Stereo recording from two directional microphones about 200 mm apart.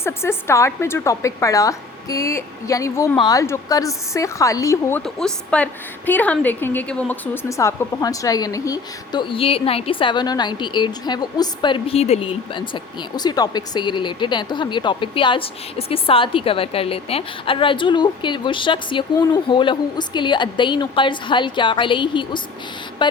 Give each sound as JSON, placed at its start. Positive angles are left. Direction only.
{"t": 0.0, "sound": "a woman's voice", "side_deg": 10}